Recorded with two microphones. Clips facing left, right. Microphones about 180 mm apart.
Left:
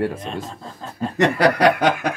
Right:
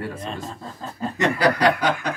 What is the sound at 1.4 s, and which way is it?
Snicker, 75° left (ahead or behind).